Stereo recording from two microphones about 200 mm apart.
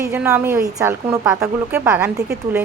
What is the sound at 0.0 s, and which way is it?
Speech, 10° right (ahead or behind).